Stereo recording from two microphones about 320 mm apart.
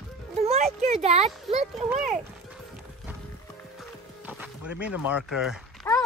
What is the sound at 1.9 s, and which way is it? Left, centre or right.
Speech, centre.